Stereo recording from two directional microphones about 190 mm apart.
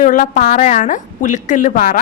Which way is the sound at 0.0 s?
45° left (ahead or behind).